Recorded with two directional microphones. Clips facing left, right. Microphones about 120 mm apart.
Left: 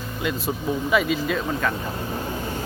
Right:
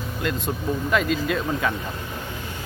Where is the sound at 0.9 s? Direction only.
5° left (ahead or behind).